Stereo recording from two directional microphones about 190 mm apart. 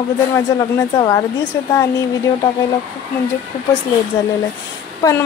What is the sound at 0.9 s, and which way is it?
Speech, 20° left (ahead or behind).